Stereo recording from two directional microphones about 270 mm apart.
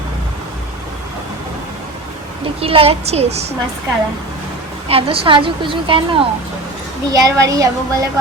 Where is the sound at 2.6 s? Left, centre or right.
Right.